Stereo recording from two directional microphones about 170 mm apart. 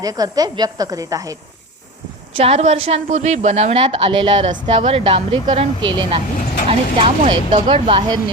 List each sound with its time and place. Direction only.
0.0 s a woman's voice: 20° right (ahead or behind)
2.3 s a woman's voice: 35° right (ahead or behind)